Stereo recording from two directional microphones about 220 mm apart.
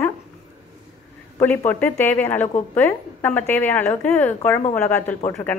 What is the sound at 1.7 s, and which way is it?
A woman's voice, 10° left (ahead or behind).